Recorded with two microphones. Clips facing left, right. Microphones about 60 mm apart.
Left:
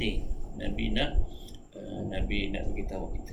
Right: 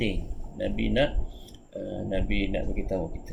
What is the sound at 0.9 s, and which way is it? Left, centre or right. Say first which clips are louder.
Speech: right 7 dB; right.